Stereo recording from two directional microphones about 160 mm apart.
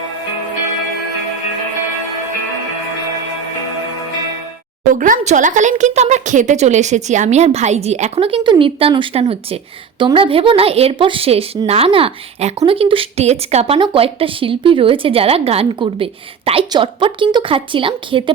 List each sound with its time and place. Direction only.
4.9 s a woman's voice: 55° right (ahead or behind); by 18.2 s 30° right (ahead or behind)